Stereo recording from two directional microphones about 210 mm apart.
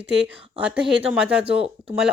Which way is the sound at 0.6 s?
5° right (ahead or behind).